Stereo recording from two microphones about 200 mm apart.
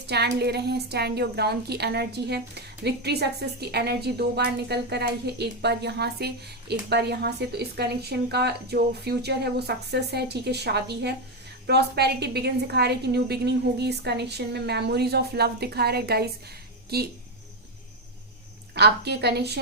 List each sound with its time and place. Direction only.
0.1 s a woman's voice: 55° right (ahead or behind)
18.7 s a woman's voice: 55° right (ahead or behind)